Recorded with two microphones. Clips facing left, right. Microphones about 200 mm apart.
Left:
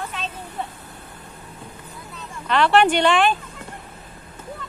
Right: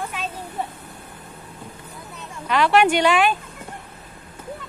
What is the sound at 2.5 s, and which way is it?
Speech, 10° right (ahead or behind).